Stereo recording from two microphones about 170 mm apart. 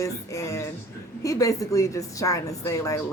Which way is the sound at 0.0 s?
20° left (ahead or behind).